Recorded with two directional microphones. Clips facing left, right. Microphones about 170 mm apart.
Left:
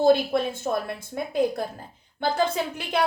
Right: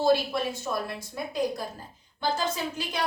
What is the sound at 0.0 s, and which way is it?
A woman's voice, 55° left (ahead or behind).